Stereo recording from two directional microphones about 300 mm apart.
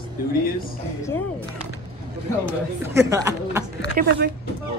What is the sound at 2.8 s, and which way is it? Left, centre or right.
Speech, centre.